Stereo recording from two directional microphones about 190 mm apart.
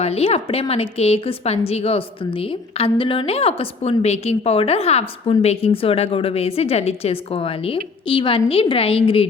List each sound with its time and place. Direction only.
0.0 s a woman's voice: 35° left (ahead or behind)